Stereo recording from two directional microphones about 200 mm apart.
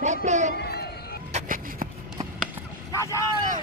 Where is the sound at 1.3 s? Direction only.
45° right (ahead or behind).